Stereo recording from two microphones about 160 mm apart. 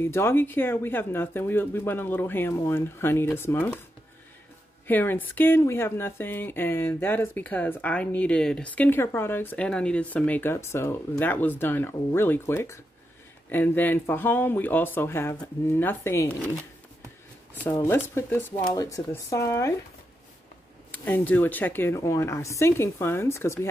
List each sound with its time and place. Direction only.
0.0 s speech: 15° left (ahead or behind)
4.8 s speech: 10° left (ahead or behind)
17.7 s speech: 15° left (ahead or behind)
20.9 s speech: 10° left (ahead or behind)